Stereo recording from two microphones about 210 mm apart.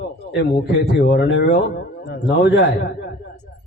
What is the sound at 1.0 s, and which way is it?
A man's voice, 60° left (ahead or behind).